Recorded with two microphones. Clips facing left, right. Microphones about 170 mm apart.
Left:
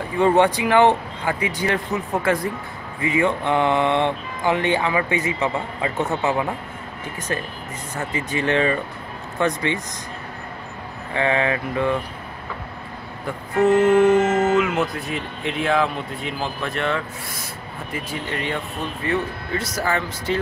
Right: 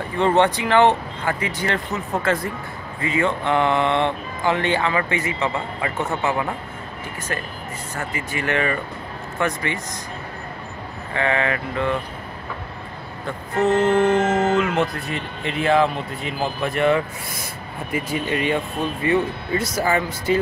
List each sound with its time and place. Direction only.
0.2 s speech: 10° left (ahead or behind)
8.1 s speech: 20° left (ahead or behind)
11.1 s speech: 20° left (ahead or behind)
13.7 s speech: 10° left (ahead or behind); by 20.3 s 10° right (ahead or behind)